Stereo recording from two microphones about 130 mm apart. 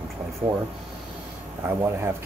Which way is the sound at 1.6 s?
20° right (ahead or behind).